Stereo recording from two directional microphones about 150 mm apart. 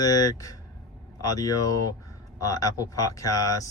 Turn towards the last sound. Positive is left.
turn(degrees=25)  # may be behind; listen again after turning